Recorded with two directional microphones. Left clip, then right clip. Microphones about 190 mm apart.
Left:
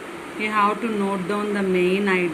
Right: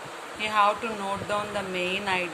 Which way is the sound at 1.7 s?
15° right (ahead or behind).